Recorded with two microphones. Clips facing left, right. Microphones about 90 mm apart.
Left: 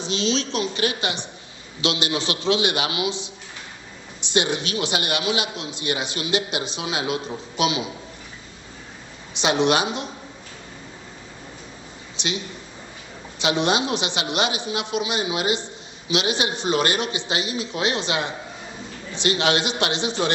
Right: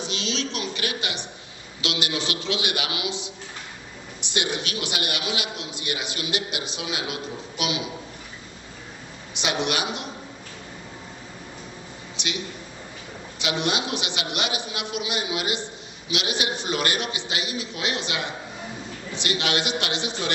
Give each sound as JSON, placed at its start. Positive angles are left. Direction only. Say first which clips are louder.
{"t": 0.0, "sound": "a man's voice", "louder": "left 5 dB", "side_deg": 30}
{"t": 9.3, "sound": "a man's voice", "louder": "left 6 dB", "side_deg": 25}
{"t": 12.1, "sound": "a sound", "louder": "left 4 dB", "side_deg": 25}
{"t": 13.4, "sound": "a man's voice", "louder": "left 5 dB", "side_deg": 30}